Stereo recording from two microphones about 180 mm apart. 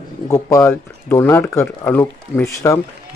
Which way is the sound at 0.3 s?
15° left (ahead or behind).